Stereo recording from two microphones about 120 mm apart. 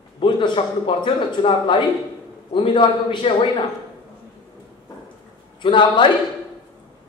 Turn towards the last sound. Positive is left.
turn(degrees=40)  # may be behind; listen again after turning